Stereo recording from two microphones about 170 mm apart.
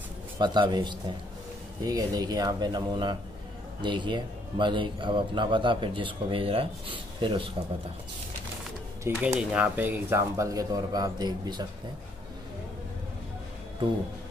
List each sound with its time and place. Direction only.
0.4 s a man's voice: 25° right (ahead or behind)
9.1 s a man's voice: 15° right (ahead or behind)